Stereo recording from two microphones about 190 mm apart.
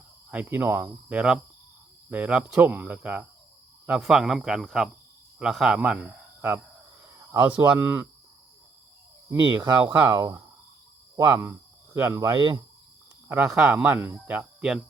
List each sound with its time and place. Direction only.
0.3 s speech: 10° right (ahead or behind)
9.3 s speech: 15° right (ahead or behind)